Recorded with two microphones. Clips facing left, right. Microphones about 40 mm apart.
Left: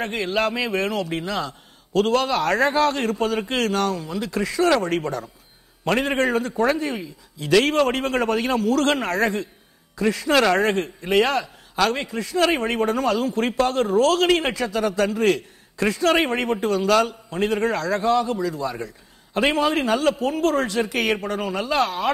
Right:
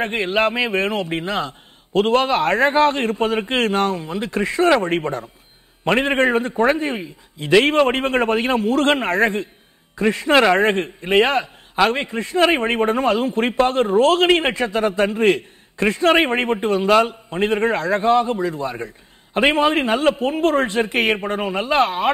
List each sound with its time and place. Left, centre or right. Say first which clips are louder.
0.0 s a man's voice: right 4 dB; right